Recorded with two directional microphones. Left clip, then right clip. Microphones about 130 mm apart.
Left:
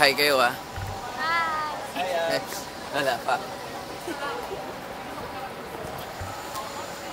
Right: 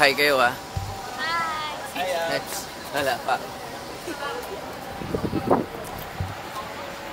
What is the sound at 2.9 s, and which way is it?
Speech, 40° right (ahead or behind).